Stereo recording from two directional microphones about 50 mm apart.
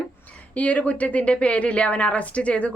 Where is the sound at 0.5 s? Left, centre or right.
Left.